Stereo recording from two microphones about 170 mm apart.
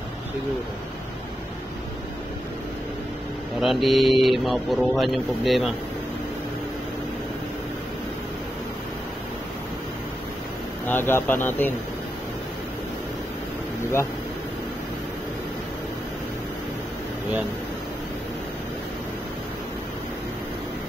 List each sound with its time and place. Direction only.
3.6 s speech: centre (ahead or behind)
10.9 s speech: 15° left (ahead or behind)